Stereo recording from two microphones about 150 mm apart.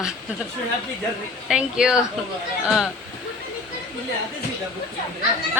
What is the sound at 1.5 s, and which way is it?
A woman's voice, 5° right (ahead or behind).